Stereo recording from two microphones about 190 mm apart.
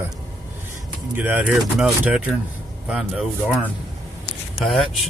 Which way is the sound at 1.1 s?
10° right (ahead or behind).